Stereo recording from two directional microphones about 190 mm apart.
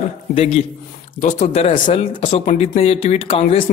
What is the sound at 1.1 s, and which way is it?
Speech, 45° left (ahead or behind).